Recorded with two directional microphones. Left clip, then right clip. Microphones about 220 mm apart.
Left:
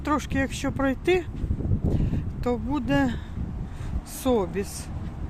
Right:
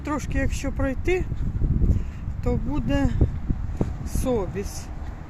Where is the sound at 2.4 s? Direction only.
10° left (ahead or behind).